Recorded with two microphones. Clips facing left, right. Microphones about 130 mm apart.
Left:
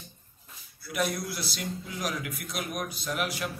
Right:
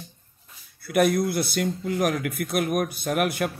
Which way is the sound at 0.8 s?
55° right (ahead or behind).